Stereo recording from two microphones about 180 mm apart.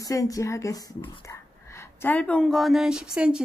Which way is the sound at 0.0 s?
20° left (ahead or behind).